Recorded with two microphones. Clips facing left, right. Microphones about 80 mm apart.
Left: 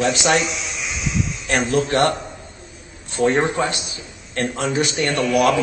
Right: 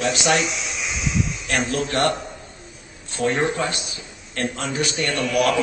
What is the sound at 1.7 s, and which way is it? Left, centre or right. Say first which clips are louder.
Speech: left 8 dB; left.